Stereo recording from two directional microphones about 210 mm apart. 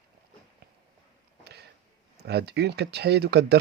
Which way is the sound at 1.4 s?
50° right (ahead or behind).